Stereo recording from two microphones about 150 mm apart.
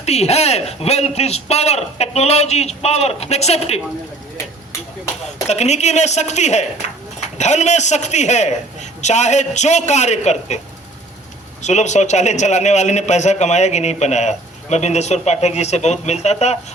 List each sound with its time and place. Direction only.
0.0 s speech: 45° left (ahead or behind)
5.5 s speech: 50° left (ahead or behind)
11.6 s speech: 50° left (ahead or behind)